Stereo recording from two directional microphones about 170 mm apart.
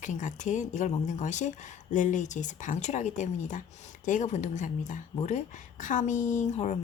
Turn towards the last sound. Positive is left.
turn(degrees=40)  # may be behind; listen again after turning